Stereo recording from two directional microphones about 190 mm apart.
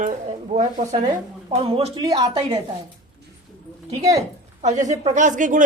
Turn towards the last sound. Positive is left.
turn(degrees=-45)  # may be behind; listen again after turning